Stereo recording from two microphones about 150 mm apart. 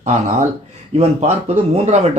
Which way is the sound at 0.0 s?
55° right (ahead or behind).